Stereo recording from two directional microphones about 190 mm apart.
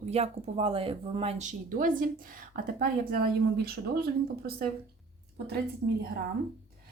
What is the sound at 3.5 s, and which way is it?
A woman's voice, 55° right (ahead or behind).